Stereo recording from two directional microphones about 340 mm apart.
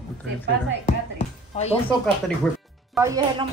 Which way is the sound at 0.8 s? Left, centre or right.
Centre.